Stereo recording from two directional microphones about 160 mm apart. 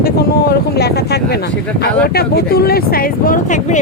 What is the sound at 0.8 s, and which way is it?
Speech, 90° left.